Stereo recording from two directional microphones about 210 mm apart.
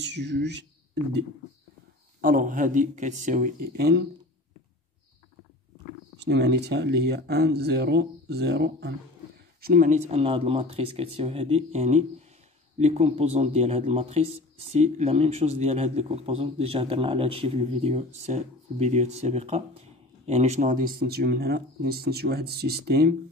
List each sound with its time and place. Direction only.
0.0 s speech: 55° right (ahead or behind)
2.2 s speech: 40° right (ahead or behind)
6.1 s speech: 55° right (ahead or behind)